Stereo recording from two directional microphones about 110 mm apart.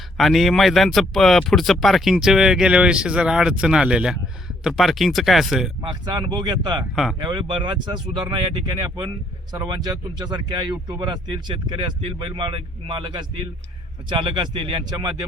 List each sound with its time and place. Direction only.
0.2 s speech: centre (ahead or behind)
5.8 s speech: 45° right (ahead or behind)
6.9 s speech: centre (ahead or behind)
7.2 s speech: 45° right (ahead or behind)
9.5 s speech: 40° right (ahead or behind)